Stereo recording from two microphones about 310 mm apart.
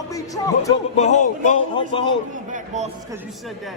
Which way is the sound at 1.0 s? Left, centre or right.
Left.